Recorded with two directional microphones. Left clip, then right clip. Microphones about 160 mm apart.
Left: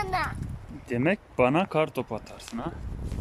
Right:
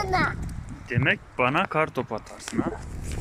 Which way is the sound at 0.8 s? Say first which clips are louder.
Right 2 dB; 30° left (ahead or behind).